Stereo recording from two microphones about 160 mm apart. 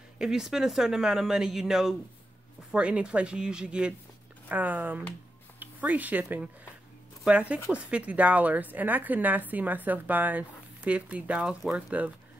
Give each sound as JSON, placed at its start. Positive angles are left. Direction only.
{"t": 0.2, "sound": "a woman's voice", "side_deg": -5}